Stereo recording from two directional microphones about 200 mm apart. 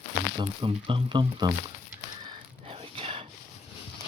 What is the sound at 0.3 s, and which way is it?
Speech, 25° right (ahead or behind).